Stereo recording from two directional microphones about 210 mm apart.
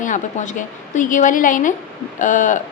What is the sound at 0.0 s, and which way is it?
A woman's voice, 35° left (ahead or behind).